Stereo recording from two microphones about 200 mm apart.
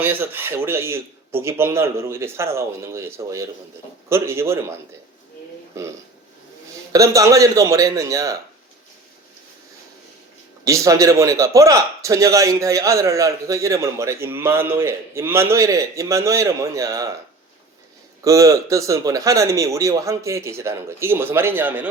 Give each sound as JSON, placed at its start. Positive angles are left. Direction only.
{"t": 0.0, "sound": "a man's voice", "side_deg": -10}
{"t": 6.9, "sound": "a man's voice", "side_deg": -15}
{"t": 10.6, "sound": "a man's voice", "side_deg": -15}
{"t": 18.2, "sound": "a man's voice", "side_deg": -15}